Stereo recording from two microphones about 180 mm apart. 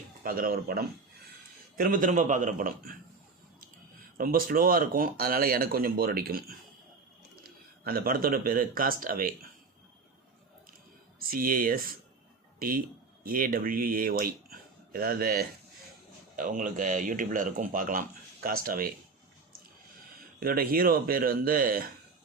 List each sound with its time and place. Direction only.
0.2 s speech: 55° right (ahead or behind)
4.2 s speech: 55° right (ahead or behind)
7.9 s speech: 55° right (ahead or behind)
11.2 s speech: 55° right (ahead or behind)
20.4 s speech: 55° right (ahead or behind)